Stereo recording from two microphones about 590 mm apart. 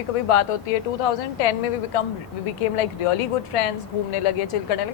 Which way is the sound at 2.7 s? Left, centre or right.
Left.